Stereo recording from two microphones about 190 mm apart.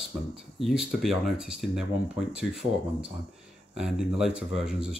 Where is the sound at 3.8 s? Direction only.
5° right (ahead or behind).